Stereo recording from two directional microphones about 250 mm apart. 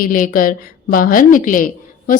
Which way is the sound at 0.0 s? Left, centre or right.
Left.